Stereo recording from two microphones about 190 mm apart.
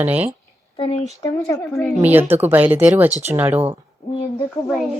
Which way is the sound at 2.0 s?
10° right (ahead or behind).